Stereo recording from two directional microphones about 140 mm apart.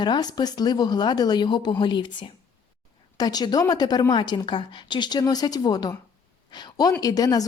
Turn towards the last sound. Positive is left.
turn(degrees=25)  # may be behind; listen again after turning